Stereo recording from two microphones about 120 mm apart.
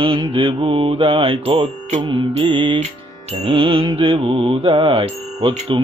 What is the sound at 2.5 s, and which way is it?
Mantra, 45° right (ahead or behind).